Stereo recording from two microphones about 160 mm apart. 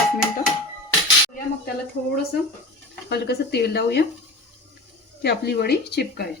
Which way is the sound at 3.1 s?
90° left.